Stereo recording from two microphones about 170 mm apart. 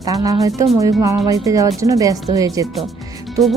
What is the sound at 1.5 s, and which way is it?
Speech, 20° right (ahead or behind).